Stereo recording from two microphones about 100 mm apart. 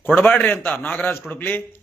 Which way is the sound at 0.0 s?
15° left (ahead or behind).